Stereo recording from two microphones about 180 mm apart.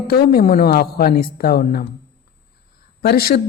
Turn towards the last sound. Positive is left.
turn(degrees=60)  # may be behind; listen again after turning